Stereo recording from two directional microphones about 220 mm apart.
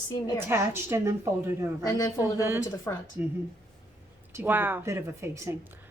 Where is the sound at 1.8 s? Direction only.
15° left (ahead or behind).